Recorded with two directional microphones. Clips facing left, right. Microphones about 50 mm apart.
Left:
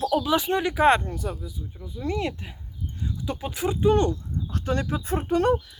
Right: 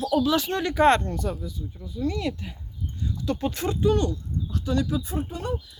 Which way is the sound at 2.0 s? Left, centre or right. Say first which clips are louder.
Even; left.